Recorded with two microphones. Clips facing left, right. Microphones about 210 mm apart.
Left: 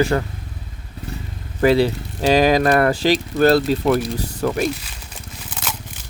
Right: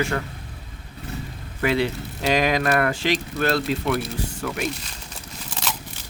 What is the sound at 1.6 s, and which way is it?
Speech, 35° left (ahead or behind).